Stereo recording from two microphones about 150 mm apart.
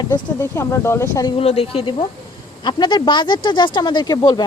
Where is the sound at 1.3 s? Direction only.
40° left (ahead or behind).